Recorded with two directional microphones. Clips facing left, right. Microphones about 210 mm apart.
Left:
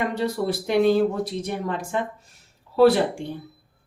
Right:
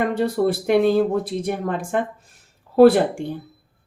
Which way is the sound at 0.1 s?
50° right (ahead or behind).